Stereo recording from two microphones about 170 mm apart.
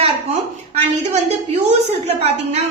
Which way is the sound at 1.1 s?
40° right (ahead or behind).